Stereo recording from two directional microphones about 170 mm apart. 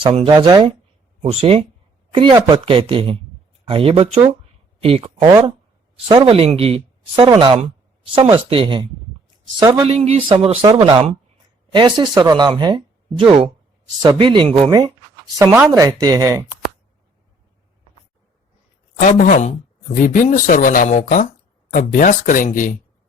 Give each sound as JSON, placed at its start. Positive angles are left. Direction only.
{"t": 0.0, "sound": "speech", "side_deg": -30}
{"t": 5.2, "sound": "speech", "side_deg": -20}
{"t": 6.1, "sound": "speech", "side_deg": -30}
{"t": 18.9, "sound": "speech", "side_deg": 50}